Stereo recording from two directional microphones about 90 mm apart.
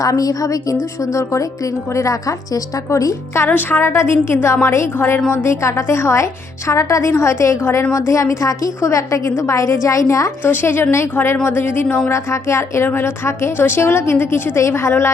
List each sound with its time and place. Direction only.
0.0 s a woman's voice: 40° left (ahead or behind)
3.4 s a woman's voice: 20° left (ahead or behind)
10.4 s a woman's voice: 25° left (ahead or behind)